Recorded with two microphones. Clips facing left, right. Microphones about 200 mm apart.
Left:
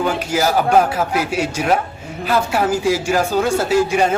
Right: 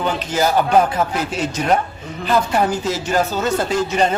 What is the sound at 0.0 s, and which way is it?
Speech, 10° left (ahead or behind).